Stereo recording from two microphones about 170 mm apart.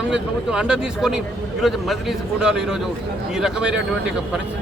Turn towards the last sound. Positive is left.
turn(degrees=-5)  # may be behind; listen again after turning